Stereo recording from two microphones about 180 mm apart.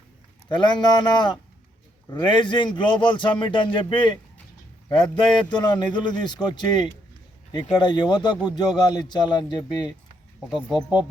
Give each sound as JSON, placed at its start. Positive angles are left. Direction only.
{"t": 0.4, "sound": "speech", "side_deg": 25}
{"t": 4.9, "sound": "a sound", "side_deg": 5}
{"t": 5.5, "sound": "speech", "side_deg": 25}